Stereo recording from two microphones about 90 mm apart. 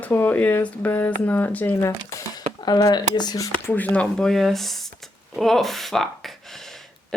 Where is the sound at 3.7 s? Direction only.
20° left (ahead or behind).